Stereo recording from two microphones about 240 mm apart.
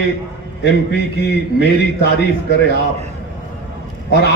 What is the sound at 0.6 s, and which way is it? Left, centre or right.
A man's voice, left.